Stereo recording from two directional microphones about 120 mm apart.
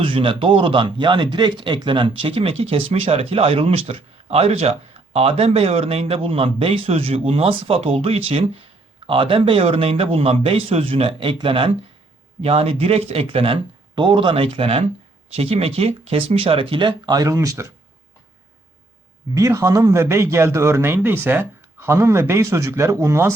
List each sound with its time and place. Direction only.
0.0 s speech: 45° right (ahead or behind); by 17.7 s 25° right (ahead or behind)
19.3 s a man's voice: 25° right (ahead or behind)